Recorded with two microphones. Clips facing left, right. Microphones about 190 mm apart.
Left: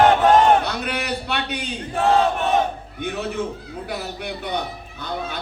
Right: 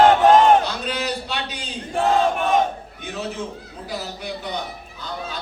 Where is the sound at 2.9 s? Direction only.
60° left (ahead or behind).